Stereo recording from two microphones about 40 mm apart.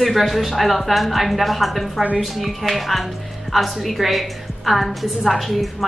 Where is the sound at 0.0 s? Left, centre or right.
Centre.